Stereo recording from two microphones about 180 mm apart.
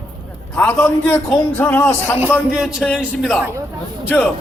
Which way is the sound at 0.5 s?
5° left (ahead or behind).